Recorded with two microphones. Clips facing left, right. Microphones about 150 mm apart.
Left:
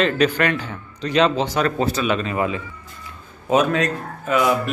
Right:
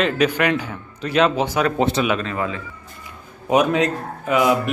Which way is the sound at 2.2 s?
15° left (ahead or behind).